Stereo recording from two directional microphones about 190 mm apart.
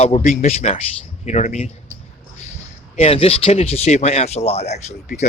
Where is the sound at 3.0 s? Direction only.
30° left (ahead or behind).